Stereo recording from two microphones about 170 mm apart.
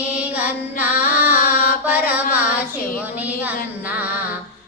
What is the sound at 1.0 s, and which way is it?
Carnatic music, 55° left (ahead or behind).